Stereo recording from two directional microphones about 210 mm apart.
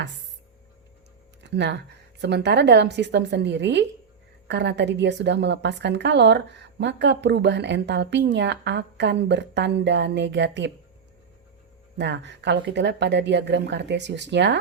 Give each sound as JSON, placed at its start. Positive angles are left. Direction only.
{"t": 1.5, "sound": "a woman's voice", "side_deg": -55}
{"t": 11.9, "sound": "a woman's voice", "side_deg": -55}